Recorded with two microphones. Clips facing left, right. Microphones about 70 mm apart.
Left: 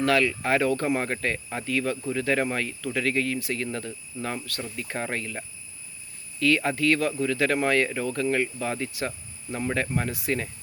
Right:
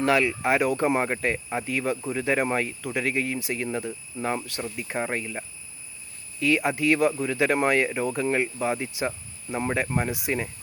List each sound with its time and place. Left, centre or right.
0.0 s speech: centre